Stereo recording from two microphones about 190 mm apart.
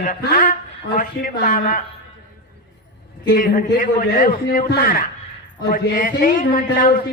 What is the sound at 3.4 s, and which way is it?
A man's voice, 45° left (ahead or behind).